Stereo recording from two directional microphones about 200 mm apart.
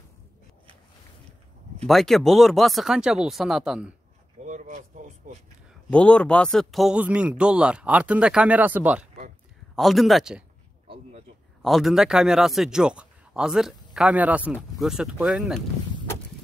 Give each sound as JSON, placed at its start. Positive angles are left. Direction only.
{"t": 1.9, "sound": "a man's voice", "side_deg": 0}
{"t": 4.5, "sound": "a sound", "side_deg": -35}
{"t": 5.9, "sound": "a man's voice", "side_deg": 5}
{"t": 11.6, "sound": "a man's voice", "side_deg": 0}